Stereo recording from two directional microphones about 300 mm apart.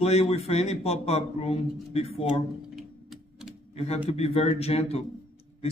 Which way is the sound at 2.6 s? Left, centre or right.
Centre.